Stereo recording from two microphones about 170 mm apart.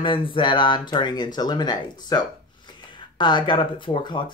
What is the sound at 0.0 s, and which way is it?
Speech, 30° left (ahead or behind).